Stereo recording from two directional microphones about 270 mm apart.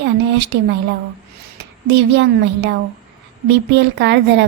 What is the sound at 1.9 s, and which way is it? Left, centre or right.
A woman's voice, right.